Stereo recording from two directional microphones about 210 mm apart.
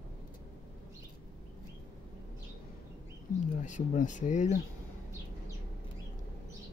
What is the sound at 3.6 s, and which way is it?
Speech, 35° left (ahead or behind).